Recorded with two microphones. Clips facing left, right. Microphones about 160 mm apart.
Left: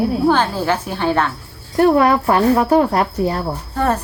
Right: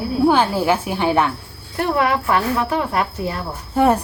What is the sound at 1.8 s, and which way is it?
A woman's voice, 40° left (ahead or behind).